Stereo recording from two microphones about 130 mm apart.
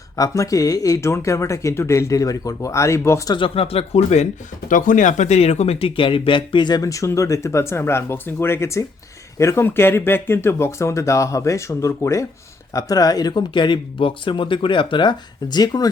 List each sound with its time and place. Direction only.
0.2 s speech: 25° left (ahead or behind)
3.3 s speech: 45° left (ahead or behind)
4.7 s speech: 80° left; by 15.9 s 30° left (ahead or behind)